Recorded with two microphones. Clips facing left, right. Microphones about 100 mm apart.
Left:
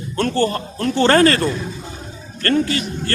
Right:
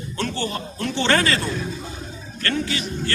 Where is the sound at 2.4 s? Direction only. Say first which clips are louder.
Left 7 dB; 45° left (ahead or behind).